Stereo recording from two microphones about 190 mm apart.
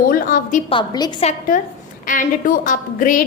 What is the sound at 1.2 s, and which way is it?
A woman's voice, 45° left (ahead or behind).